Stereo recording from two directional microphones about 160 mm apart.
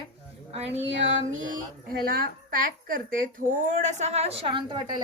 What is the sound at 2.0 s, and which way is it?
A woman's voice, 65° right (ahead or behind).